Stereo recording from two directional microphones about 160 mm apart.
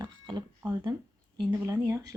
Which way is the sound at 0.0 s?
25° right (ahead or behind).